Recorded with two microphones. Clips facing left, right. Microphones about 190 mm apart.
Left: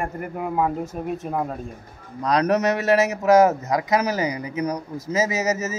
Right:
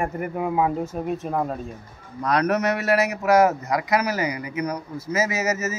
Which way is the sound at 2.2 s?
15° left (ahead or behind).